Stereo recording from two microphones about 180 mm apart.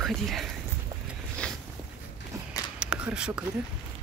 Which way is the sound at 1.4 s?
5° left (ahead or behind).